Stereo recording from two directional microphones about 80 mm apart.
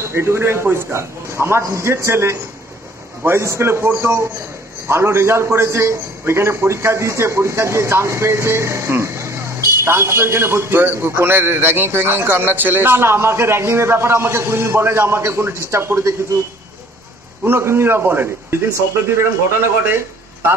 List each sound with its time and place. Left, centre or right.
0.1 s a man's voice: right
17.4 s a man's voice: right